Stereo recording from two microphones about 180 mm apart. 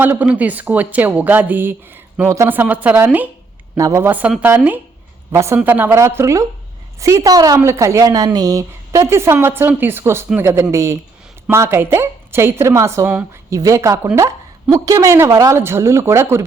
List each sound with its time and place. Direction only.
0.0 s a woman's voice: 10° right (ahead or behind)